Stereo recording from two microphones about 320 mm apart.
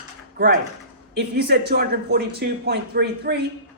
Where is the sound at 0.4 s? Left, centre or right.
Right.